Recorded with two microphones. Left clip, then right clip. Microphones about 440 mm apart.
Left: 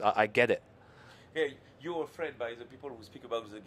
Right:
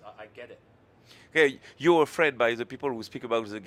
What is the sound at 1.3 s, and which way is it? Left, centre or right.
A man's voice, right.